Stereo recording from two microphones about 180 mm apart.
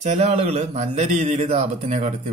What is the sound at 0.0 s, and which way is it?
A man's voice, 40° right (ahead or behind).